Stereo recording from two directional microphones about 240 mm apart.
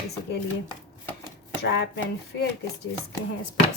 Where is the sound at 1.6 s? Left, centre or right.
Left.